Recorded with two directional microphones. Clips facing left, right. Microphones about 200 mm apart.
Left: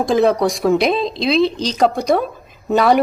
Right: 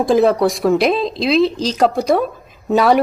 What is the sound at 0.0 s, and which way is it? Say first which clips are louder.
Speech: right 2 dB; centre (ahead or behind).